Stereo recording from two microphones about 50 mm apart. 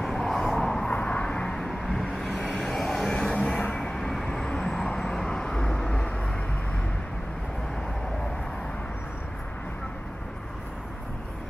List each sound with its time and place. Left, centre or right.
0.0 s vehicle: centre
0.8 s vehicle: left